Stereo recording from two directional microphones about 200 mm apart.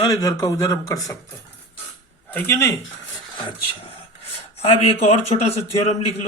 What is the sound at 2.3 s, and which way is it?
Speech, 15° left (ahead or behind).